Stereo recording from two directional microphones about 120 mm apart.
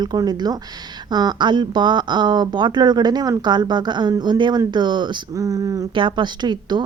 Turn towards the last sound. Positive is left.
turn(degrees=-35)  # may be behind; listen again after turning